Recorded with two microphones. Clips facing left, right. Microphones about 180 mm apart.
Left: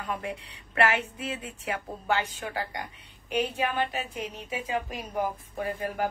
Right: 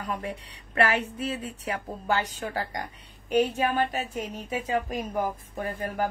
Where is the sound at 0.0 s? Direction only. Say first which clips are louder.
Right 1 dB; 40° right (ahead or behind).